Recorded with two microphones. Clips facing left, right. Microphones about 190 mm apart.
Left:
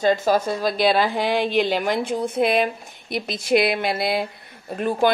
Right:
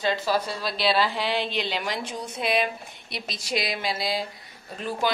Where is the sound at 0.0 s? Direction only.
45° left (ahead or behind).